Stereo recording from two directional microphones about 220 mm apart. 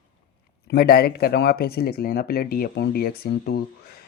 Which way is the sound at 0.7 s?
45° left (ahead or behind).